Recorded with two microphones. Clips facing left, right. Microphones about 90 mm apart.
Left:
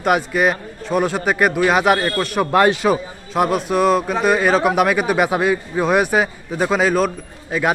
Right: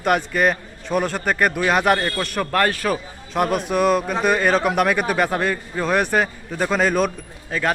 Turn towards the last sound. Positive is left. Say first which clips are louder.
# left 3 dB
turn(degrees=10)  # may be behind; listen again after turning